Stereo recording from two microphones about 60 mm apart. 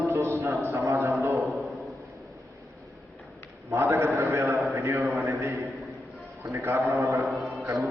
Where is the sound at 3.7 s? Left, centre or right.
Right.